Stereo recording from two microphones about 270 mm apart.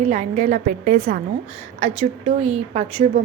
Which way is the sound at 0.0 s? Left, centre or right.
Right.